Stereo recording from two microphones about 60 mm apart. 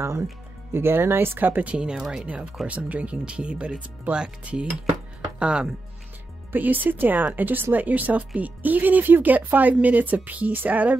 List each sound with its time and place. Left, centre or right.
0.0 s speech: right
0.7 s speech: right; by 2.2 s centre
2.6 s speech: right
6.5 s speech: right